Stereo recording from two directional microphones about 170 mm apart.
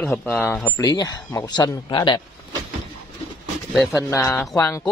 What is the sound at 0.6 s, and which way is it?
A man's voice, 20° left (ahead or behind).